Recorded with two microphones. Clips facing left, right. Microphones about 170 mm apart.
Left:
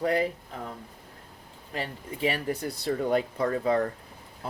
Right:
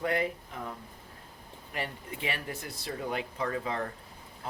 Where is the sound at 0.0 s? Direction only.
35° left (ahead or behind).